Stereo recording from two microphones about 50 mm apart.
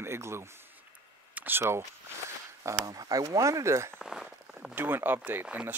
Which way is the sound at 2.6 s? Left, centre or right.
Right.